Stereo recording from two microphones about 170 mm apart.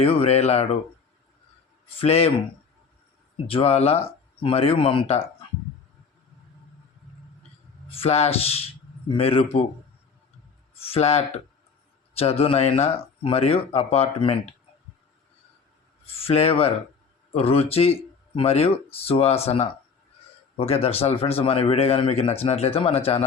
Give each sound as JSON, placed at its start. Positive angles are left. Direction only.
{"t": 0.0, "sound": "speech", "side_deg": 35}
{"t": 2.0, "sound": "speech", "side_deg": 35}
{"t": 3.5, "sound": "speech", "side_deg": 35}
{"t": 7.9, "sound": "speech", "side_deg": 35}
{"t": 10.8, "sound": "speech", "side_deg": 35}
{"t": 16.0, "sound": "speech", "side_deg": 35}